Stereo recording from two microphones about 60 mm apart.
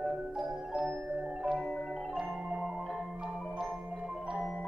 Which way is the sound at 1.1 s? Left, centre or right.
Centre.